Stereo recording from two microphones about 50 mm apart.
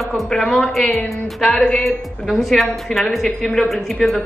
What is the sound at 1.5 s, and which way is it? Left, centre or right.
Speech, centre.